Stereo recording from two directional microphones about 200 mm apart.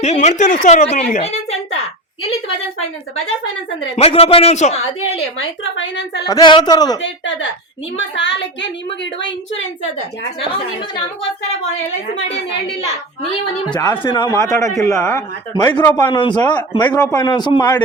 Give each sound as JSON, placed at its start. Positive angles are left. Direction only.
{"t": 0.0, "sound": "a woman's voice", "side_deg": 35}
{"t": 3.8, "sound": "a woman's voice", "side_deg": 30}
{"t": 5.4, "sound": "a woman's voice", "side_deg": 70}
{"t": 6.2, "sound": "a woman's voice", "side_deg": 20}
{"t": 7.0, "sound": "a woman's voice", "side_deg": 65}
{"t": 13.7, "sound": "a man's voice", "side_deg": 20}